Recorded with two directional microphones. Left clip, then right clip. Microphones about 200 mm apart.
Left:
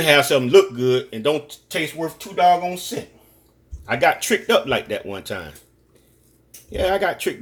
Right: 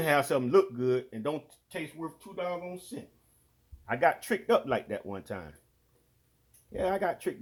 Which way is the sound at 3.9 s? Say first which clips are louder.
Left 9 dB; 35° right (ahead or behind).